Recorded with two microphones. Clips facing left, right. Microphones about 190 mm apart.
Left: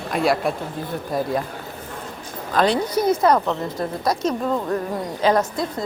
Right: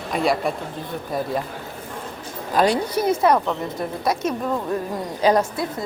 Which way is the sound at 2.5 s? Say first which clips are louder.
Even; 10° right (ahead or behind).